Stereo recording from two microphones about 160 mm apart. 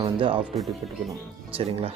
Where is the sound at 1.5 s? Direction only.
40° right (ahead or behind).